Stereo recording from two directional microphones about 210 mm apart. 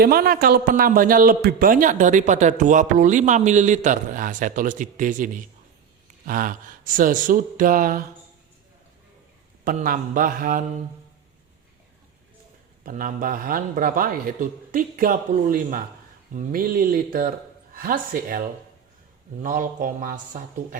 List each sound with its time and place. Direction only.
0.0 s a man's voice: 45° right (ahead or behind)
9.6 s a man's voice: 40° right (ahead or behind)
12.8 s a man's voice: 40° right (ahead or behind)